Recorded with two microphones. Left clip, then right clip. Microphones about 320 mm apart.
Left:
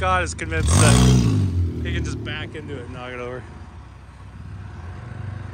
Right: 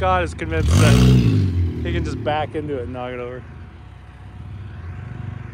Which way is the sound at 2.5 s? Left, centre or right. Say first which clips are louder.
Right 8 dB; centre.